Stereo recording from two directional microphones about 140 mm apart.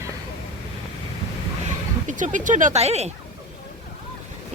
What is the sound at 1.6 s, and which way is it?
Speech, 65° right (ahead or behind).